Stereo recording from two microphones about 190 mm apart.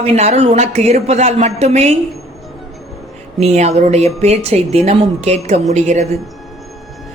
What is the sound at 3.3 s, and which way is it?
A woman's voice, 35° right (ahead or behind).